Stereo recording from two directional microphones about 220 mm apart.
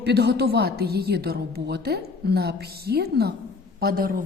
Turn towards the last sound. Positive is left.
turn(degrees=-40)  # may be behind; listen again after turning